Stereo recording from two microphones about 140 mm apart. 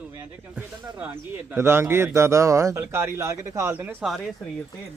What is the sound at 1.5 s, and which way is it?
Speech, 15° right (ahead or behind).